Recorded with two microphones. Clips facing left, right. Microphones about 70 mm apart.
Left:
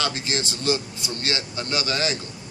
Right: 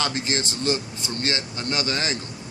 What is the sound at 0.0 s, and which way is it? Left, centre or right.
A man's voice, right.